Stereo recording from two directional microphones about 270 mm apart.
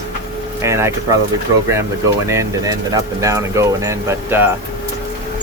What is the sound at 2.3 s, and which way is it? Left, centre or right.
Speech, centre.